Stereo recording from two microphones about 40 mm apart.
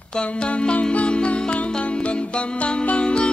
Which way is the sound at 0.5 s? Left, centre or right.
Left.